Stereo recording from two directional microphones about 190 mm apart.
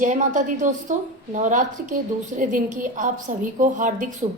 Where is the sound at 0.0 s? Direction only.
40° right (ahead or behind).